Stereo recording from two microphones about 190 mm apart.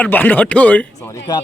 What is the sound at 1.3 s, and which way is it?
Speech, 20° left (ahead or behind).